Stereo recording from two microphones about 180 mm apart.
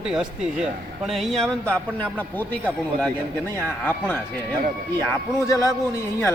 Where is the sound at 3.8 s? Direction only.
10° left (ahead or behind).